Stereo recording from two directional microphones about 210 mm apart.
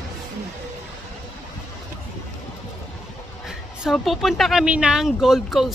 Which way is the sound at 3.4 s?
Centre (ahead or behind).